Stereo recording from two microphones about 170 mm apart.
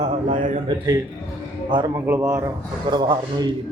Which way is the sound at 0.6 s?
20° right (ahead or behind).